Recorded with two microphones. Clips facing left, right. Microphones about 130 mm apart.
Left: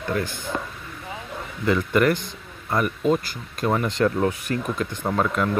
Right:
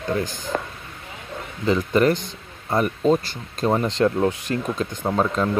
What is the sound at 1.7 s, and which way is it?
Speech, 25° right (ahead or behind).